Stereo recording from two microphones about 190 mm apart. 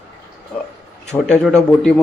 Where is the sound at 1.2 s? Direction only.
5° left (ahead or behind).